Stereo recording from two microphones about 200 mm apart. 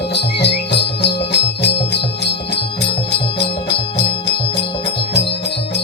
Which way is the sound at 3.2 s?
30° left (ahead or behind).